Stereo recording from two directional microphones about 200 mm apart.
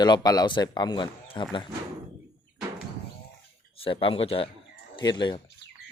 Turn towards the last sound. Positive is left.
turn(degrees=25)  # may be behind; listen again after turning